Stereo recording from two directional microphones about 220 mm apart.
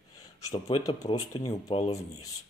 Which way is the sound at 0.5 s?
15° left (ahead or behind).